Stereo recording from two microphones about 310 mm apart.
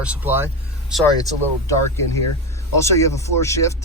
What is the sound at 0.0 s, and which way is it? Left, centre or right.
Speech, centre.